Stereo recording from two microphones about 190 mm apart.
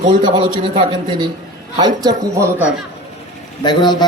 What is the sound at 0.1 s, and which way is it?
A man's voice, 25° right (ahead or behind).